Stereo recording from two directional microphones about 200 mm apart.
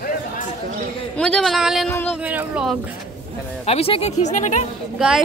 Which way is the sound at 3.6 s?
30° left (ahead or behind).